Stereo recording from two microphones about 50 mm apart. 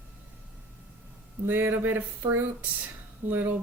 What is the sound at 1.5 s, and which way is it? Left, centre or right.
Speech, right.